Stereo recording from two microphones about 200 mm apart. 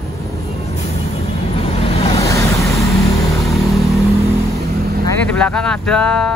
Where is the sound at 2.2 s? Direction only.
15° left (ahead or behind).